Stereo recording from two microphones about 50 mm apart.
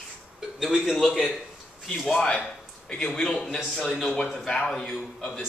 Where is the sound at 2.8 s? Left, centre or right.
Centre.